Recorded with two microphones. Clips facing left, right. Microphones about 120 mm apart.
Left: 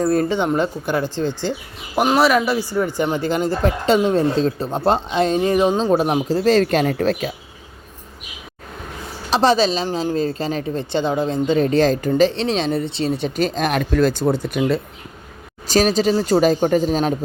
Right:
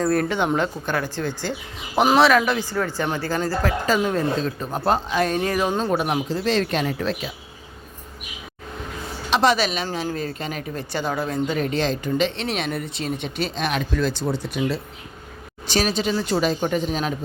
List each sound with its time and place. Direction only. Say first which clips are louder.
0.0 s speech: left 3 dB; 20° left (ahead or behind)
2.0 s speech: even; 5° left (ahead or behind); by 5.8 s 20° left (ahead or behind)
5.9 s speech: left 5 dB; 30° left (ahead or behind); by 7.3 s 45° left (ahead or behind)
9.3 s speech: left 4 dB; 30° left (ahead or behind); by 14.8 s 55° left (ahead or behind)
15.6 s speech: left 6 dB; 40° left (ahead or behind)